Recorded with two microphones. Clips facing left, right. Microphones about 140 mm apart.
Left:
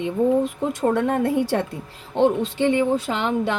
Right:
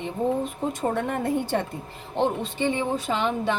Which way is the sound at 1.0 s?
70° left (ahead or behind).